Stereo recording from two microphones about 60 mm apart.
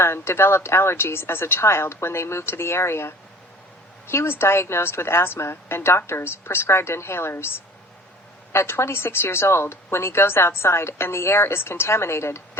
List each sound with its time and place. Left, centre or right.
0.0 s speech: left